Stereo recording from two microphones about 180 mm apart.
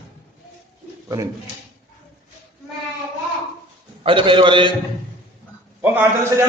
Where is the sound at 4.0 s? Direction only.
30° right (ahead or behind).